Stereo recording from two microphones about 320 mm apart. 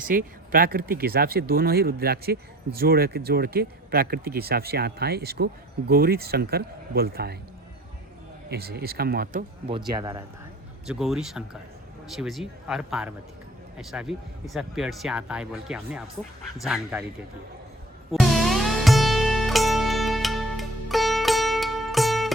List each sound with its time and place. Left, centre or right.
0.0 s speech: right
8.4 s speech: right
9.9 s speech: centre
18.1 s music: centre